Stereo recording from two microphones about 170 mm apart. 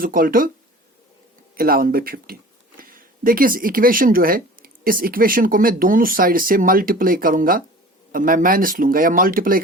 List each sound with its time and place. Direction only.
0.0 s speech: 55° right (ahead or behind)
1.5 s speech: 60° right (ahead or behind)